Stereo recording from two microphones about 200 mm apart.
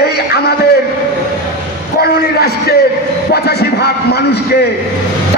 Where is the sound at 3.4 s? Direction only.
55° left (ahead or behind).